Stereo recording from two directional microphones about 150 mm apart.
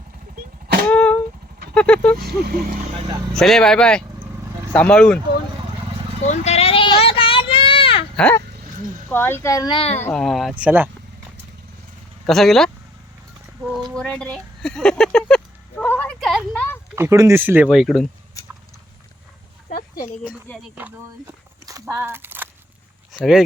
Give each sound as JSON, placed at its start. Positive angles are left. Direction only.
{"t": 0.9, "sound": "a sound", "side_deg": 10}
{"t": 1.7, "sound": "speech", "side_deg": 5}
{"t": 2.1, "sound": "speech", "side_deg": -90}
{"t": 3.3, "sound": "speech", "side_deg": 5}
{"t": 6.2, "sound": "a sound", "side_deg": 50}
{"t": 8.1, "sound": "dog", "side_deg": 10}
{"t": 9.1, "sound": "speech", "side_deg": 15}
{"t": 9.7, "sound": "speech", "side_deg": 40}
{"t": 10.0, "sound": "speech", "side_deg": 5}
{"t": 12.2, "sound": "speech", "side_deg": 0}
{"t": 13.9, "sound": "a sound", "side_deg": 5}
{"t": 16.9, "sound": "speech", "side_deg": -20}
{"t": 21.7, "sound": "a sound", "side_deg": -20}